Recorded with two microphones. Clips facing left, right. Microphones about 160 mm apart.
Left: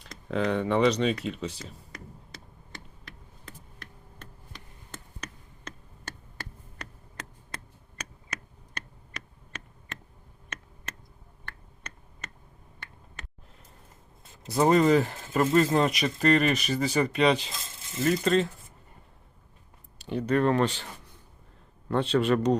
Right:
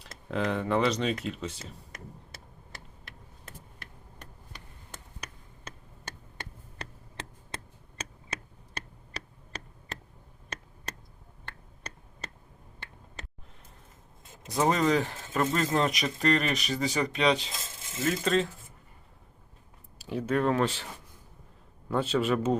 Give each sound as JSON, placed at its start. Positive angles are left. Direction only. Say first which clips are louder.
{"t": 0.0, "sound": "speech", "louder": "left 2 dB", "side_deg": 0}
{"t": 4.9, "sound": "a sound", "louder": "left 3 dB", "side_deg": -10}
{"t": 6.3, "sound": "tick", "louder": "even", "side_deg": -25}
{"t": 10.9, "sound": "a sound", "louder": "right 2 dB", "side_deg": -35}
{"t": 11.9, "sound": "tick", "louder": "right 2 dB", "side_deg": -35}
{"t": 14.4, "sound": "speech", "louder": "left 4 dB", "side_deg": 5}
{"t": 20.0, "sound": "speech", "louder": "left 3 dB", "side_deg": -5}
{"t": 21.8, "sound": "speech", "louder": "left 3 dB", "side_deg": -5}